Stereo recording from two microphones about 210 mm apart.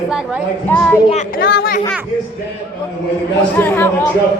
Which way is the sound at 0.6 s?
5° left (ahead or behind).